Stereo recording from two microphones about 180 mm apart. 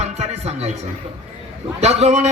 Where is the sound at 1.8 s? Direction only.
35° right (ahead or behind).